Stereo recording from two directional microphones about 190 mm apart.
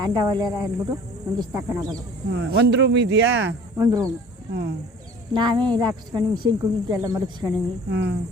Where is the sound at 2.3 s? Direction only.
65° right (ahead or behind).